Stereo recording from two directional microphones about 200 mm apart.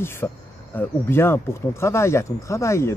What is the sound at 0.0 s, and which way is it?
Speech, 10° left (ahead or behind).